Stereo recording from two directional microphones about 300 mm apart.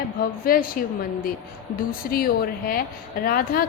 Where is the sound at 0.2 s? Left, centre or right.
Left.